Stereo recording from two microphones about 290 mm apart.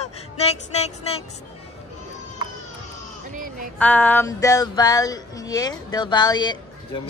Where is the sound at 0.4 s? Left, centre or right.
Left.